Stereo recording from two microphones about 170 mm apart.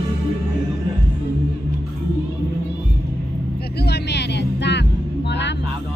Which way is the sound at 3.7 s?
75° left (ahead or behind).